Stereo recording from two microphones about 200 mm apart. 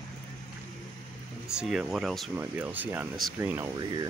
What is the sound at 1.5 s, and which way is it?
Speech, 5° right (ahead or behind).